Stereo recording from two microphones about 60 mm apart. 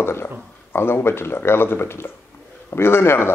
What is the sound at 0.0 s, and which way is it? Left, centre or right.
Speech, left.